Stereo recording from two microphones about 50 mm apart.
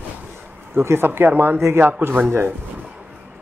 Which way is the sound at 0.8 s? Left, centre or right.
Right.